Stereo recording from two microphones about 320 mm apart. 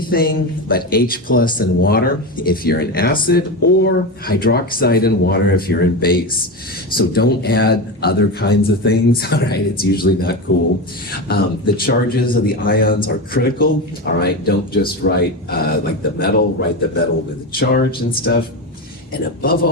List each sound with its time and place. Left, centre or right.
0.1 s speech: left